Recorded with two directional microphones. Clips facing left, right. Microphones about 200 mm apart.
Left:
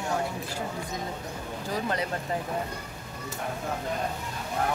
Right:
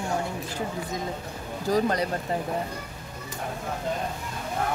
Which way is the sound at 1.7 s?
40° right (ahead or behind).